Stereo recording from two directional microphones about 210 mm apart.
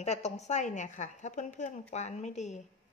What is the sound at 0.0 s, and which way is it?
A woman's voice, 30° left (ahead or behind).